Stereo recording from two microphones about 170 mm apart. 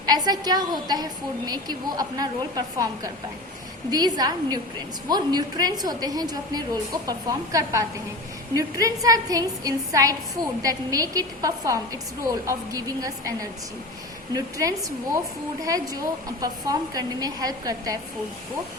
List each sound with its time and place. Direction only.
0.0 s a woman's voice: 25° right (ahead or behind)